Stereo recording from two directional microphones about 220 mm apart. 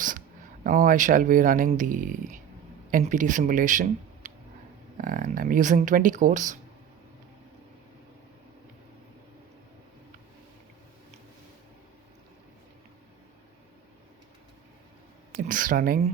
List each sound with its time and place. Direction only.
0.6 s speech: 35° right (ahead or behind)
15.4 s speech: 40° right (ahead or behind)